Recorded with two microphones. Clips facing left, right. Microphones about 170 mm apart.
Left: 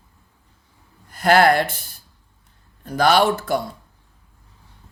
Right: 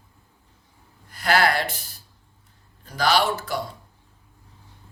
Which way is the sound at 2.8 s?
55° left (ahead or behind).